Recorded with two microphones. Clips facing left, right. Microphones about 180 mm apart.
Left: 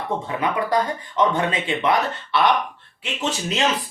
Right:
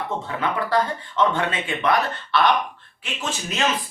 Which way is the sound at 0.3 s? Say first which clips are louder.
Left 2 dB; 20° left (ahead or behind).